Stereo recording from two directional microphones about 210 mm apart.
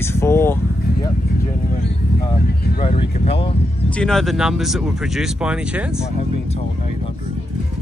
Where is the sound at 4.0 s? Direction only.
Centre (ahead or behind).